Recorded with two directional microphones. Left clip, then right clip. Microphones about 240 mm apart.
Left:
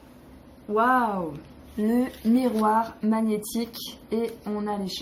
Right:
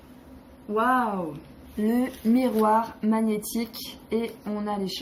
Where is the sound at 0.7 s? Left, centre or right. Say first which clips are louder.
Left 2 dB; centre.